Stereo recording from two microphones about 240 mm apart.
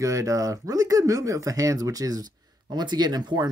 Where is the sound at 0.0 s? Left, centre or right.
Centre.